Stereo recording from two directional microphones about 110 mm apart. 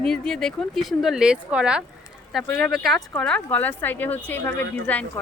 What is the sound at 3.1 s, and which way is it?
A woman's voice, 10° left (ahead or behind).